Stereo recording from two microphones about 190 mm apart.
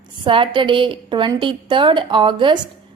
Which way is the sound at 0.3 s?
25° right (ahead or behind).